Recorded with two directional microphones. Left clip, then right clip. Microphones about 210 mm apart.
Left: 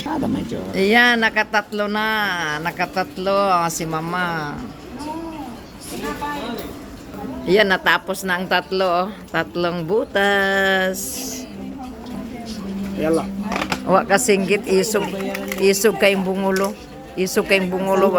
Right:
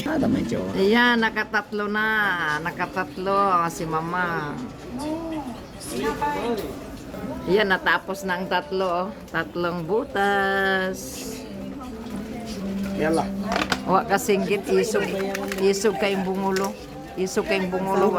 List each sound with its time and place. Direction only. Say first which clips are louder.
0.0 s speech: even; 20° right (ahead or behind)
0.8 s speech: left 5 dB; 20° left (ahead or behind)
7.4 s a woman's voice: left 5 dB; 15° left (ahead or behind)
13.8 s a woman's voice: left 7 dB; 15° left (ahead or behind)